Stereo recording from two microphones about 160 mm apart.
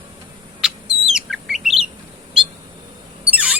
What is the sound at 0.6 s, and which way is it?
Bird, 5° right (ahead or behind).